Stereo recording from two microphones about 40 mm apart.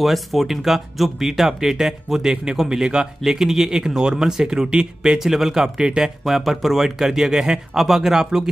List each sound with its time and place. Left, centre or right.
0.0 s speech: centre
6.2 s speech: centre